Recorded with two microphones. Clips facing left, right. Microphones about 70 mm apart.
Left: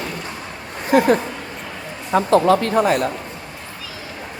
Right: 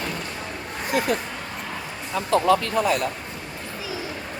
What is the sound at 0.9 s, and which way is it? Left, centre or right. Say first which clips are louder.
Speech: left 9 dB; left.